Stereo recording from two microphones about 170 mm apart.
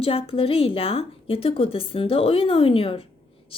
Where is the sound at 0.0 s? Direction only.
35° left (ahead or behind).